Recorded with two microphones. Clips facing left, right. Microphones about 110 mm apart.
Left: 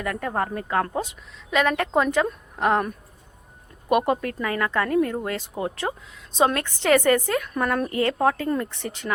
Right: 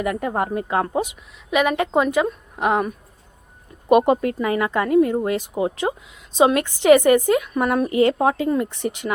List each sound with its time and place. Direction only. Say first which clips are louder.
0.0 s a woman's voice: right 4 dB; 15° right (ahead or behind)
3.8 s a woman's voice: right 6 dB; 20° right (ahead or behind)